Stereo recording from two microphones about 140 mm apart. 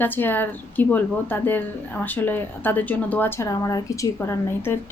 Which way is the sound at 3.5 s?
25° left (ahead or behind).